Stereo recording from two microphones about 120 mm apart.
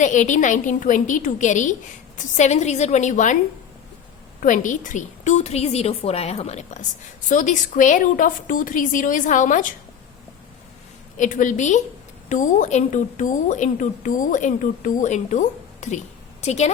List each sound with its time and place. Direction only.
0.0 s a woman's voice: 90° left
4.4 s a woman's voice: 90° left; by 6.8 s 70° left (ahead or behind)
7.3 s a woman's voice: 90° left
11.2 s a woman's voice: 90° left
16.4 s a woman's voice: 65° left (ahead or behind)